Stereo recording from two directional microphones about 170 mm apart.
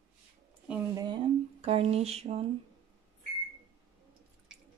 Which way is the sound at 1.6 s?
40° right (ahead or behind).